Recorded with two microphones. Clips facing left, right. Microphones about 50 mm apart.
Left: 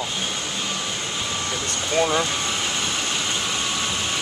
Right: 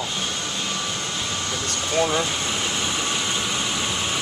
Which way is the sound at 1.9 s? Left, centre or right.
Centre.